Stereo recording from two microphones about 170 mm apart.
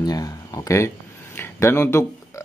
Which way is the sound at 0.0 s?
20° left (ahead or behind).